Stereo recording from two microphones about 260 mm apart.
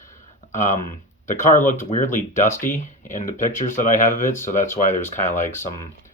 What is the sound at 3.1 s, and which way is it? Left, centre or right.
Speech, left.